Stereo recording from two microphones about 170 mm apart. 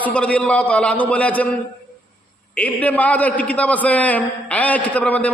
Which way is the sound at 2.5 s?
10° left (ahead or behind).